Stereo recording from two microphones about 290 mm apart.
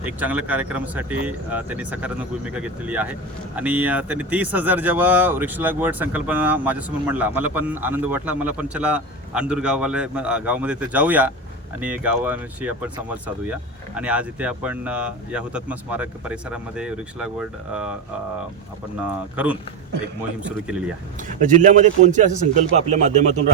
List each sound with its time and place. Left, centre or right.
0.0 s speech: centre
18.9 s speech: centre
21.2 s a man's voice: right